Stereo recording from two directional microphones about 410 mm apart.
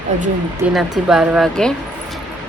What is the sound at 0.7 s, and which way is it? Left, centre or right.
Speech, centre.